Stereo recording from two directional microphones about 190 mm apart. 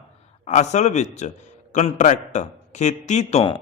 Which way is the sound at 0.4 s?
35° left (ahead or behind).